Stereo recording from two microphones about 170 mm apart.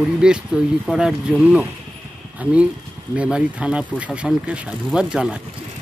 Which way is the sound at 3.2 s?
5° right (ahead or behind).